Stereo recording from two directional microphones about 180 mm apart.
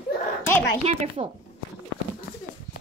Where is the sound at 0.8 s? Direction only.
35° right (ahead or behind).